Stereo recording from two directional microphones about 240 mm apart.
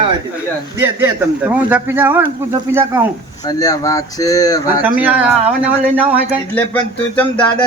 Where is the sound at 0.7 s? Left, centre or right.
Centre.